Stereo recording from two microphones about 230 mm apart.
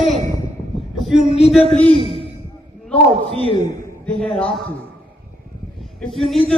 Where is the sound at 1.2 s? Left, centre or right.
Left.